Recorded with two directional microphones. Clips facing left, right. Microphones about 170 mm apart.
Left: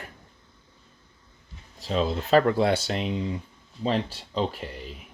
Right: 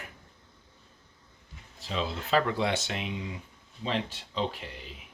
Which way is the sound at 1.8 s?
40° left (ahead or behind).